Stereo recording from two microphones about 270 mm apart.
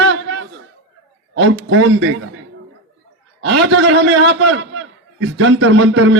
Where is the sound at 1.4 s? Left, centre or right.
Right.